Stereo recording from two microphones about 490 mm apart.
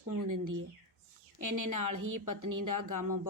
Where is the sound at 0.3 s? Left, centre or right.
Right.